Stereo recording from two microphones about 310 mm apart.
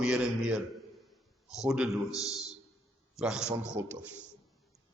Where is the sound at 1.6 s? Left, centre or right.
Centre.